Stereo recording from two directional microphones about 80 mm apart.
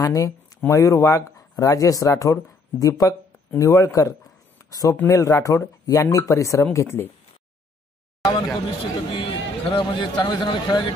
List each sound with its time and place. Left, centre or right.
0.0 s speech: left
4.6 s a sound: left
5.0 s speech: left
8.6 s a man's voice: left